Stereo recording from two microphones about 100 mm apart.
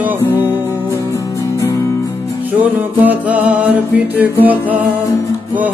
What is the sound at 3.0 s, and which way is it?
Music, 15° right (ahead or behind).